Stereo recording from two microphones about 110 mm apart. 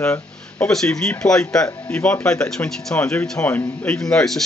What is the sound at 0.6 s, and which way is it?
Speech, 5° left (ahead or behind).